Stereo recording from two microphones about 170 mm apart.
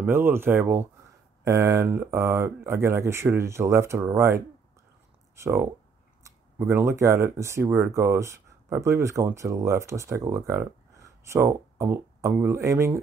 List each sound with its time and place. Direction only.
0.0 s speech: 15° right (ahead or behind)